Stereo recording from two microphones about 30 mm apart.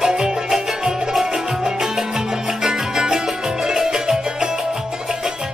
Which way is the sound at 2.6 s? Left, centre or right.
Centre.